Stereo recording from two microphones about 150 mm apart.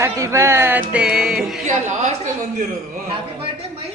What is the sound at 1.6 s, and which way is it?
A woman's voice, 50° right (ahead or behind).